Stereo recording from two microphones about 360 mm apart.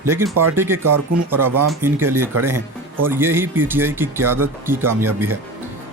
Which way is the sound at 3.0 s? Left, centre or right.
Centre.